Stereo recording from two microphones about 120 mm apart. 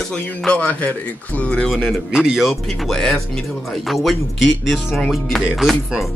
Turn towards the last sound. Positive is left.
turn(degrees=0)  # may be behind; listen again after turning